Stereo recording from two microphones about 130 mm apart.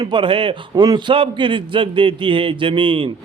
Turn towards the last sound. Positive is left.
turn(degrees=-40)  # may be behind; listen again after turning